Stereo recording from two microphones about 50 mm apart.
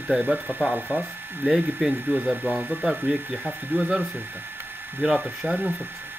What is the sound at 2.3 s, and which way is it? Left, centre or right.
Speech, right.